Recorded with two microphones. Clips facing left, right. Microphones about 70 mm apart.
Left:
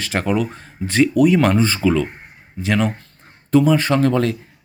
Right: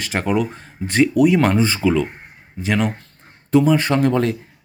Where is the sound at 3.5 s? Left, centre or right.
Right.